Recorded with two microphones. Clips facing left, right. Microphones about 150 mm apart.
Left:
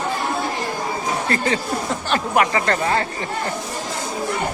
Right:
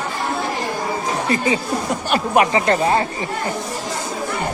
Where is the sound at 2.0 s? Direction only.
15° right (ahead or behind).